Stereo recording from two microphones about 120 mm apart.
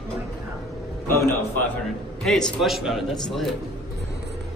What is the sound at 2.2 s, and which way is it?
A man's voice, 5° left (ahead or behind).